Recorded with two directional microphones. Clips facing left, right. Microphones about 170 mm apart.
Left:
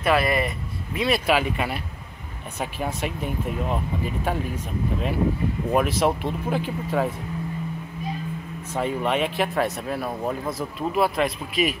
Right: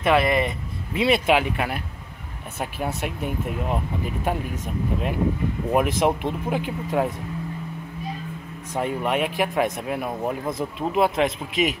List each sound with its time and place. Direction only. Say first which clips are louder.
0.0 s speech: right 2 dB; 20° right (ahead or behind)
3.0 s speech: even; 10° right (ahead or behind)
5.7 s speech: right 1 dB; 15° right (ahead or behind)
8.7 s speech: even; 10° right (ahead or behind)